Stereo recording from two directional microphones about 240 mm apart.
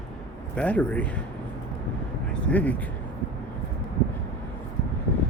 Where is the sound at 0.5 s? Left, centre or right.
Centre.